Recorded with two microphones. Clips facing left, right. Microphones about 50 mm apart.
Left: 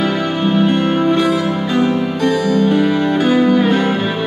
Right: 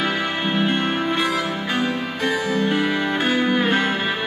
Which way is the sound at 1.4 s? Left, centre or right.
Centre.